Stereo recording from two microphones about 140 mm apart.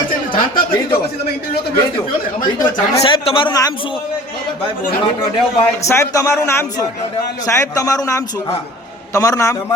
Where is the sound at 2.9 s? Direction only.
40° left (ahead or behind).